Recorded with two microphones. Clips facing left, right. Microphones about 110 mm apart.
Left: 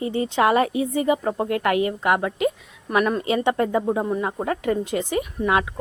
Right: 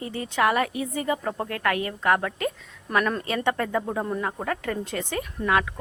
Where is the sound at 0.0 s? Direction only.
20° left (ahead or behind).